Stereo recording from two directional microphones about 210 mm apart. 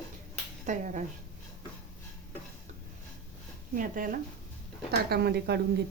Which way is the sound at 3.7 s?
40° right (ahead or behind).